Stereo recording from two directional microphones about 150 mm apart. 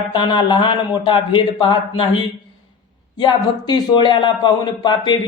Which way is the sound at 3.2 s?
30° left (ahead or behind).